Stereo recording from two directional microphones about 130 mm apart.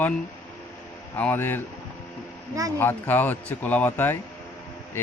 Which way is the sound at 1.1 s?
15° left (ahead or behind).